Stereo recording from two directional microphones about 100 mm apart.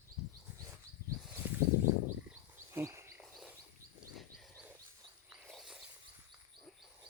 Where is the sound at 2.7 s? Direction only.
25° right (ahead or behind).